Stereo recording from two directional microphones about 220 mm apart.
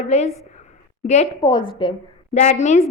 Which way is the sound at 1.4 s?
20° left (ahead or behind).